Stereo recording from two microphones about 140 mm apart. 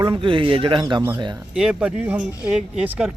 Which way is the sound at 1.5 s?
5° right (ahead or behind).